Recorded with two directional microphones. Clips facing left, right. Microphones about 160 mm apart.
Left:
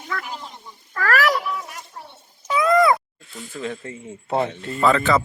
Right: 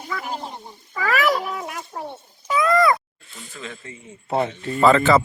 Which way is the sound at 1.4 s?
55° right (ahead or behind).